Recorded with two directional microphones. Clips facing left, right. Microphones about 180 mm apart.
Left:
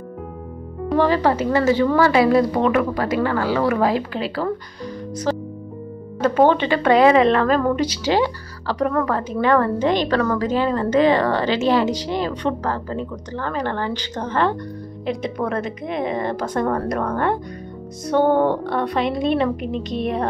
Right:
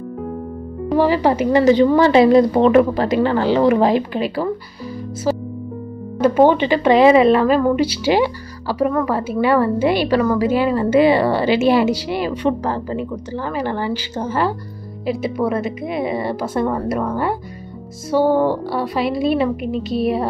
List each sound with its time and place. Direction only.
0.8 s a woman's voice: 10° right (ahead or behind)
5.3 s music: 10° right (ahead or behind)
6.2 s a woman's voice: 10° right (ahead or behind)